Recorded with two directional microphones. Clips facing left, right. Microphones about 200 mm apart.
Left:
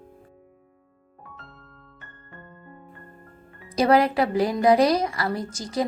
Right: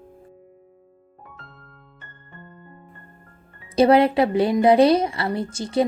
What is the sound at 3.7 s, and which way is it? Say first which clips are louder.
A woman's voice: right 4 dB; 25° right (ahead or behind).